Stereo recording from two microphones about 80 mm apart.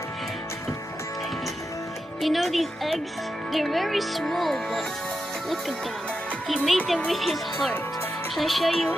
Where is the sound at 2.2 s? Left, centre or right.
Centre.